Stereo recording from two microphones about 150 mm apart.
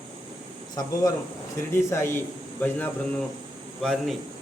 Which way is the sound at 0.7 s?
25° left (ahead or behind).